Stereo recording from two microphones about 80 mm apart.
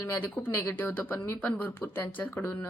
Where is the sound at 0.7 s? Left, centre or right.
Left.